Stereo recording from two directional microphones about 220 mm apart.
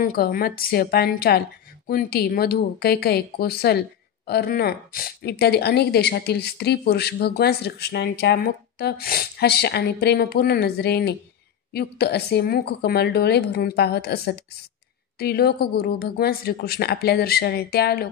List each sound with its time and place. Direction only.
0.0 s speech: 40° left (ahead or behind)